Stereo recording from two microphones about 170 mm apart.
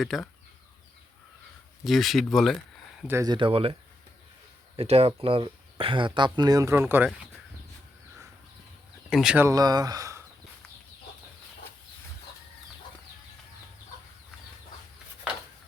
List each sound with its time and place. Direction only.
0.0 s speech: centre (ahead or behind)
1.8 s speech: centre (ahead or behind)
3.1 s speech: 15° right (ahead or behind)
3.3 s speech: 30° right (ahead or behind)
4.8 s speech: 35° right (ahead or behind); by 7.1 s 10° right (ahead or behind)
9.0 s speech: 5° right (ahead or behind)
9.5 s speech: 20° right (ahead or behind)